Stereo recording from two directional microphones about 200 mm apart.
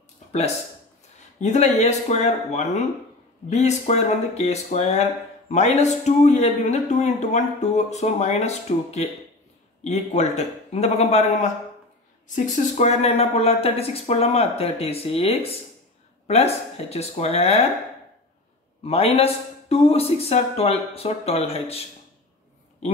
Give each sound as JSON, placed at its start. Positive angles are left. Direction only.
{"t": 1.4, "sound": "a man's voice", "side_deg": 35}
{"t": 12.5, "sound": "a man's voice", "side_deg": 35}
{"t": 18.8, "sound": "a man's voice", "side_deg": 30}